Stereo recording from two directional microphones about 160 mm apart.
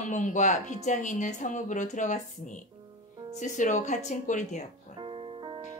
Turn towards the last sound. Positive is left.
turn(degrees=-30)  # may be behind; listen again after turning